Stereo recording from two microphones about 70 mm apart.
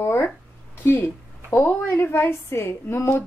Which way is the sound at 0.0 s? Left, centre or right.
Left.